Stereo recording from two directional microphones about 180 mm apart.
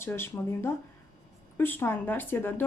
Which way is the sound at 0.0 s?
15° left (ahead or behind).